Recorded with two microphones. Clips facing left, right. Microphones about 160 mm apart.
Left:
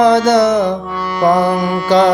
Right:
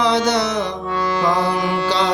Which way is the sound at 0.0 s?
50° left (ahead or behind).